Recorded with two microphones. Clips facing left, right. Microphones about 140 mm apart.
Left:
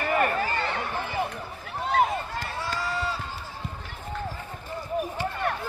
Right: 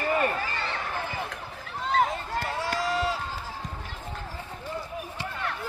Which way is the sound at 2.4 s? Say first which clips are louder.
Right 3 dB; 80° right.